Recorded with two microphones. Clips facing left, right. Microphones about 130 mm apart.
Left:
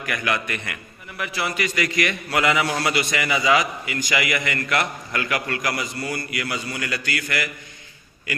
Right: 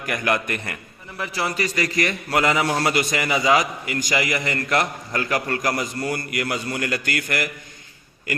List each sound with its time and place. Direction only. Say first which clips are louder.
0.0 s a man's voice: right 2 dB; 40° right (ahead or behind)